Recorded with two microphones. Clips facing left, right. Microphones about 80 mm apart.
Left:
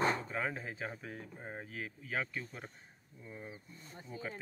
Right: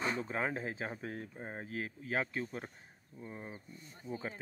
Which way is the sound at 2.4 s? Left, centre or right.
Right.